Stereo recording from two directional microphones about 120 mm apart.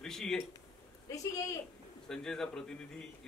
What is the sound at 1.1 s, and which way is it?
Speech, 25° left (ahead or behind).